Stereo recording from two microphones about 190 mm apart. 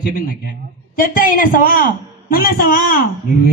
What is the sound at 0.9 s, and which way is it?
Speech, 50° left (ahead or behind).